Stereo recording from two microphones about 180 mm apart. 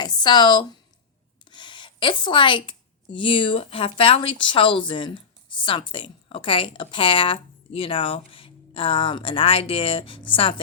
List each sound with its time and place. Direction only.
0.0 s speech: 25° left (ahead or behind)